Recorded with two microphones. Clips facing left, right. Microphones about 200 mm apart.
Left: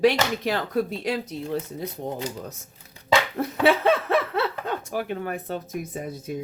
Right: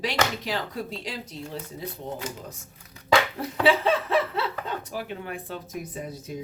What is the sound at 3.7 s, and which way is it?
Speech, 55° left (ahead or behind).